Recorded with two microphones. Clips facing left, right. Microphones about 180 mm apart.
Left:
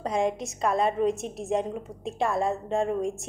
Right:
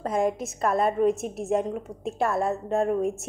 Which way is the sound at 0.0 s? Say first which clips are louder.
Right 1 dB; centre (ahead or behind).